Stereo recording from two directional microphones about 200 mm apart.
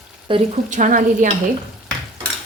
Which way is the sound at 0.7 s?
40° right (ahead or behind).